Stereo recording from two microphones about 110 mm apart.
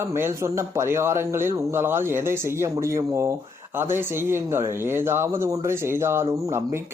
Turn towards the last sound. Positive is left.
turn(degrees=-25)  # may be behind; listen again after turning